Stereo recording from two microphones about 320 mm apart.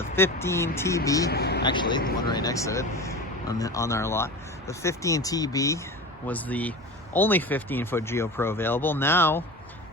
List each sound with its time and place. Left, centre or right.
0.0 s speech: centre
1.3 s speech: left
1.6 s speech: centre